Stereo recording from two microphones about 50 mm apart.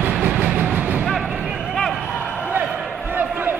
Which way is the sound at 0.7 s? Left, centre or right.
Right.